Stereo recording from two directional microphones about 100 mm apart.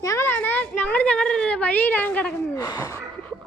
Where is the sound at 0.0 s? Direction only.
35° left (ahead or behind).